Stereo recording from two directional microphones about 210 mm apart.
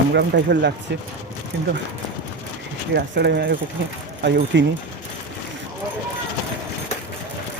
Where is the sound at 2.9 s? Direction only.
50° right (ahead or behind).